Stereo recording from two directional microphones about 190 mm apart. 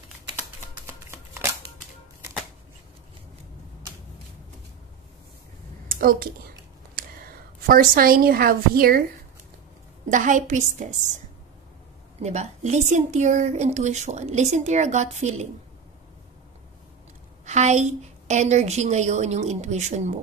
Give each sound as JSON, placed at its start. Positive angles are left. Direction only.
{"t": 0.8, "sound": "shuffling cards", "side_deg": -15}
{"t": 5.9, "sound": "a sound", "side_deg": -50}
{"t": 7.6, "sound": "a woman's voice", "side_deg": -50}
{"t": 10.0, "sound": "a woman's voice", "side_deg": -40}
{"t": 12.2, "sound": "a woman's voice", "side_deg": -35}
{"t": 17.5, "sound": "a woman's voice", "side_deg": -35}